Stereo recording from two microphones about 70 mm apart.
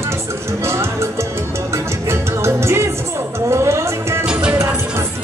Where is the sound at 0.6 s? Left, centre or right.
Right.